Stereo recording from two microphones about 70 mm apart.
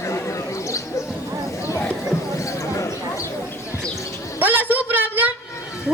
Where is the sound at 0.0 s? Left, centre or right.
Left.